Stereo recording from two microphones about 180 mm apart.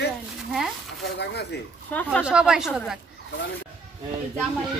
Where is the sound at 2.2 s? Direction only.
5° right (ahead or behind).